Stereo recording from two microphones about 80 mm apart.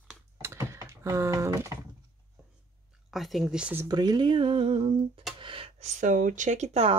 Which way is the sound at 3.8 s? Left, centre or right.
Right.